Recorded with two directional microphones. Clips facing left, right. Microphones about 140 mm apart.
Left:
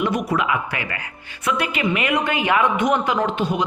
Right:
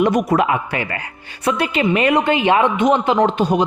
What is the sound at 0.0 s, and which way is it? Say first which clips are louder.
A man's voice: right 6 dB; 45° right (ahead or behind).